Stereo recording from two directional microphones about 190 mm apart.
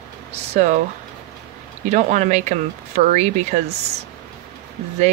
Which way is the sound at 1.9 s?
35° right (ahead or behind).